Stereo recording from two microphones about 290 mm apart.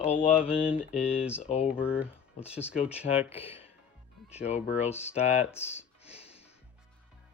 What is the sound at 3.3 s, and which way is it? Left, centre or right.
Speech, centre.